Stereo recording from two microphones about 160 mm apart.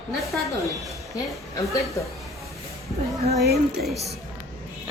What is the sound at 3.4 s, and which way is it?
Speech, 80° right.